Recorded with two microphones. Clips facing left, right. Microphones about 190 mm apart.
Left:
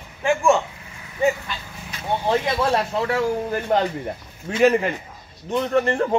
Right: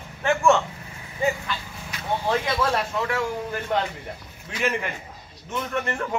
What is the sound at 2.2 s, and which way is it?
Speech, 25° left (ahead or behind).